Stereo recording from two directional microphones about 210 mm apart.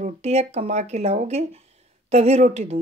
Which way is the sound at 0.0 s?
30° right (ahead or behind).